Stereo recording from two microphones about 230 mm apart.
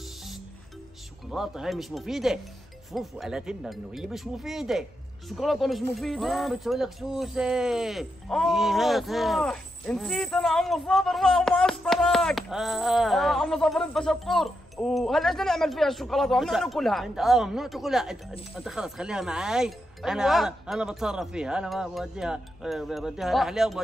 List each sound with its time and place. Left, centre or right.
1.3 s speech: centre